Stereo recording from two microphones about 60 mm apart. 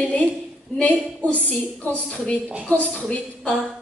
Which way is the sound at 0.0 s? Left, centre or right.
Left.